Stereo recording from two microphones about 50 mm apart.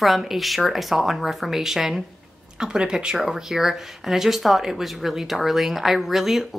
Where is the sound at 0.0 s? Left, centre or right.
Centre.